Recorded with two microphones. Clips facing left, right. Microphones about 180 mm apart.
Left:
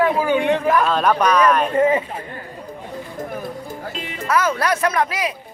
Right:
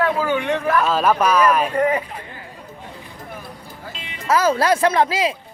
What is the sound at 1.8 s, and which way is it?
Speech, 25° left (ahead or behind).